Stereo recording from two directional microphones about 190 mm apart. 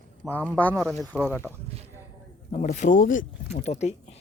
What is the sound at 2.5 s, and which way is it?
Speech, 40° left (ahead or behind).